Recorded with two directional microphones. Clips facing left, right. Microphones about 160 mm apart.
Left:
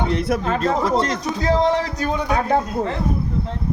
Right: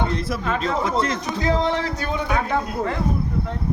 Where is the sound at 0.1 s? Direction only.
60° left (ahead or behind).